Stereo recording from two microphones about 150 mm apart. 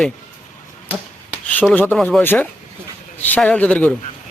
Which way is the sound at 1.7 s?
10° left (ahead or behind).